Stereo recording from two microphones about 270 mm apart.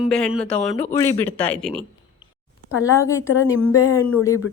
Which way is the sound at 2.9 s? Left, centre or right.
Centre.